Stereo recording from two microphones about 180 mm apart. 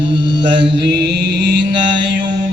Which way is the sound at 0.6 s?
65° right (ahead or behind).